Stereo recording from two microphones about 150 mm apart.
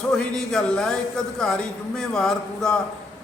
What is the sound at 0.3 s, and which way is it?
A man's voice, 5° left (ahead or behind).